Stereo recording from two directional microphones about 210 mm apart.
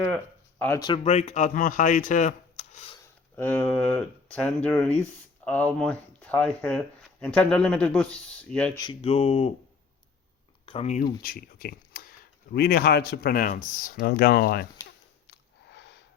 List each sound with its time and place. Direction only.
0.6 s speech: 10° left (ahead or behind)
0.9 s speech: 30° left (ahead or behind)
3.3 s speech: 10° left (ahead or behind)
8.8 s speech: 25° left (ahead or behind)
10.7 s speech: 30° left (ahead or behind)
11.0 s speech: 45° left (ahead or behind)
15.3 s a sound: 55° left (ahead or behind)